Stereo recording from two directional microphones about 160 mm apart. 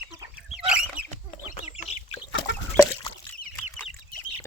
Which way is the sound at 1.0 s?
10° right (ahead or behind).